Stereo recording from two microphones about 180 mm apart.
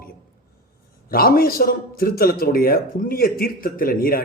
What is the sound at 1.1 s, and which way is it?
A man's voice, 55° left (ahead or behind).